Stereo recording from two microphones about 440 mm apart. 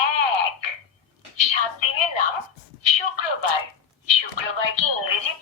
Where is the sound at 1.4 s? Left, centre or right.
Left.